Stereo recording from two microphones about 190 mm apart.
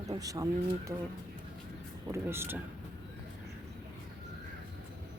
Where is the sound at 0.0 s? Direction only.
20° right (ahead or behind).